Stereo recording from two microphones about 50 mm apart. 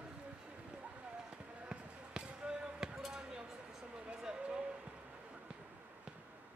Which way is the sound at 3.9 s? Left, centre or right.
Centre.